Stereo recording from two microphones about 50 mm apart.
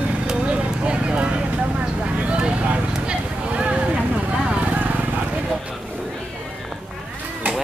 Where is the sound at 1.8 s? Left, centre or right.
Right.